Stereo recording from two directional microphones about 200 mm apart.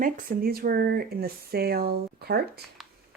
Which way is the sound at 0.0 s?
50° right (ahead or behind).